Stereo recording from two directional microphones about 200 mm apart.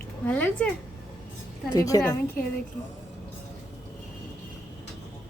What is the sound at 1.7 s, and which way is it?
Speech, 15° left (ahead or behind).